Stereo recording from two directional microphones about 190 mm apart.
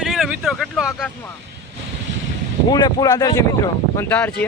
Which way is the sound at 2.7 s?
20° left (ahead or behind).